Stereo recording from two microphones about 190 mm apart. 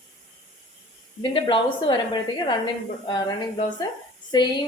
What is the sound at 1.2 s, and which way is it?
A woman's voice, 25° left (ahead or behind).